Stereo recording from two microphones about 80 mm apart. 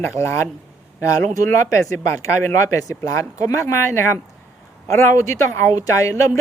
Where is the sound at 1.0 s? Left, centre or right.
Left.